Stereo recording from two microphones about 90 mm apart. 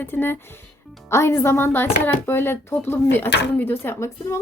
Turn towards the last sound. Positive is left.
turn(degrees=30)  # may be behind; listen again after turning